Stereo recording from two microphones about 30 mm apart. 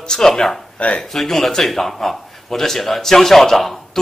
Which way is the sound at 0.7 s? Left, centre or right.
Left.